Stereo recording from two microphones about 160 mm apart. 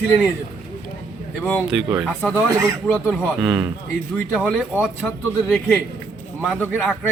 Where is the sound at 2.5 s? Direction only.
20° right (ahead or behind).